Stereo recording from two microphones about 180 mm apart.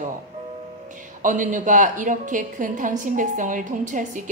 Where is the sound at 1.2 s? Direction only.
45° right (ahead or behind).